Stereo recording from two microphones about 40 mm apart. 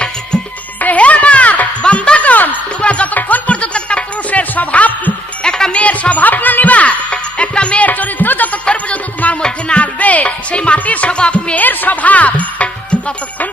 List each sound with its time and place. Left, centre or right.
0.8 s music: left
3.2 s music: left
4.3 s music: left
5.4 s music: centre
5.7 s music: left
7.9 s music: left
8.6 s music: left
11.5 s music: left